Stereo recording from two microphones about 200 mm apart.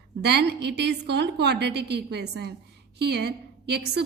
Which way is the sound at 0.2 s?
55° right (ahead or behind).